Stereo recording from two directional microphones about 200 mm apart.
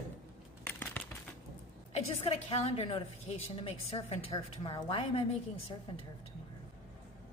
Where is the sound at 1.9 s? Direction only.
30° left (ahead or behind).